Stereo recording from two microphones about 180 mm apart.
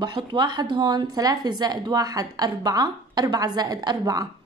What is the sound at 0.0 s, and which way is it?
A woman's voice, 25° right (ahead or behind).